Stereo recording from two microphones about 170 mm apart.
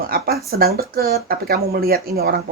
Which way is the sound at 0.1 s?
65° right (ahead or behind).